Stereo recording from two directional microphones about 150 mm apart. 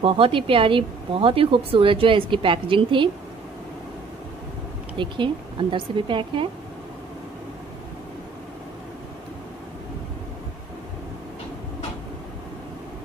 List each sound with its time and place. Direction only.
0.0 s speech: 35° right (ahead or behind)
4.9 s speech: 35° right (ahead or behind)